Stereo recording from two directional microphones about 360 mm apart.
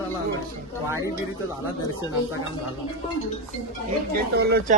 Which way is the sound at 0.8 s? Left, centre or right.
Centre.